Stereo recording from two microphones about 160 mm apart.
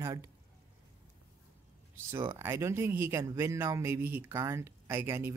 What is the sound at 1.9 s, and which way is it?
Speech, 15° right (ahead or behind).